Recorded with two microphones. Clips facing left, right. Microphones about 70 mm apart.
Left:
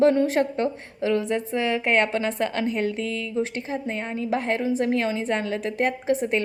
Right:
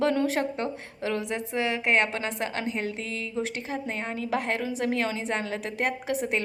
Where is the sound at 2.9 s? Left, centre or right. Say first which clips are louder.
Left 5 dB; right.